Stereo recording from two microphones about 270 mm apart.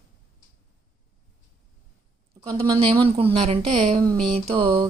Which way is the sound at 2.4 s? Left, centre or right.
Centre.